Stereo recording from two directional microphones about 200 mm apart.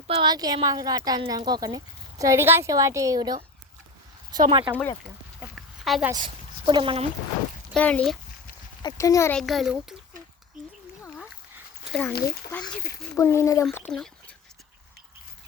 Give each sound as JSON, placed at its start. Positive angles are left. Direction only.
{"t": 0.1, "sound": "speech", "side_deg": -25}
{"t": 5.4, "sound": "a sound", "side_deg": 0}
{"t": 6.1, "sound": "speech", "side_deg": -20}
{"t": 7.7, "sound": "speech", "side_deg": 5}
{"t": 8.8, "sound": "speech", "side_deg": 20}
{"t": 9.4, "sound": "speech", "side_deg": 0}
{"t": 11.9, "sound": "speech", "side_deg": 5}
{"t": 13.1, "sound": "speech", "side_deg": 15}
{"t": 13.7, "sound": "speech", "side_deg": 5}